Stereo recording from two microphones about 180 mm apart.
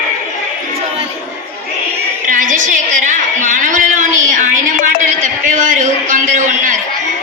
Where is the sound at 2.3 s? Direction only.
45° right (ahead or behind).